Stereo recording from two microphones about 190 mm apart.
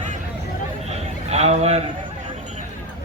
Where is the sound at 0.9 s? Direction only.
35° right (ahead or behind).